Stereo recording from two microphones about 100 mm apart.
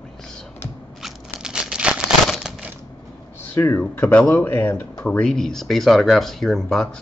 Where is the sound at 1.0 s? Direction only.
5° right (ahead or behind).